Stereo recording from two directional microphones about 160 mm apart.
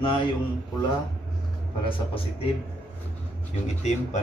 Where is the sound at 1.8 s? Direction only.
35° left (ahead or behind).